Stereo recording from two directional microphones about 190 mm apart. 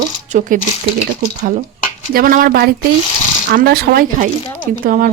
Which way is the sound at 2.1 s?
50° right (ahead or behind).